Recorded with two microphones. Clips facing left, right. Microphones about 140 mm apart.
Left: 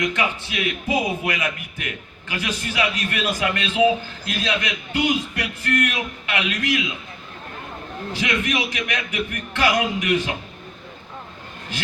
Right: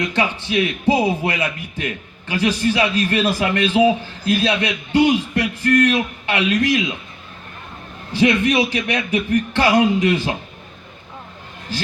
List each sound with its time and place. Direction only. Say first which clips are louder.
0.0 s a man's voice: right 2 dB; 35° right (ahead or behind)
8.1 s a man's voice: right 9 dB; 30° right (ahead or behind)